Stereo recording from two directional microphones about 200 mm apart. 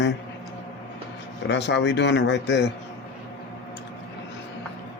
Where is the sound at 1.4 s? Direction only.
60° left (ahead or behind).